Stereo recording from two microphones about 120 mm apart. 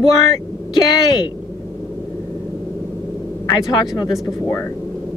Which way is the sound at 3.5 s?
35° left (ahead or behind).